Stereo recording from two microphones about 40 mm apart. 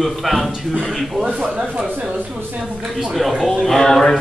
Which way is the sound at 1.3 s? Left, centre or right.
Right.